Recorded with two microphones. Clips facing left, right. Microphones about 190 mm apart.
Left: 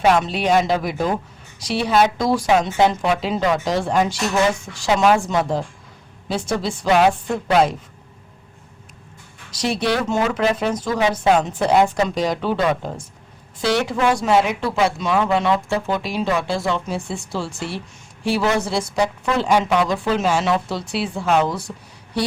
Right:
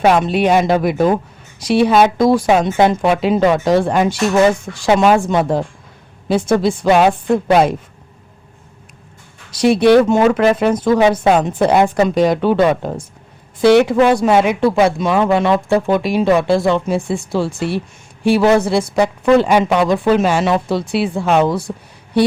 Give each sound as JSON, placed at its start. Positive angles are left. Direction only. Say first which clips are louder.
{"t": 0.0, "sound": "speech", "louder": "right 5 dB", "side_deg": -55}
{"t": 9.5, "sound": "speech", "louder": "right 11 dB", "side_deg": -55}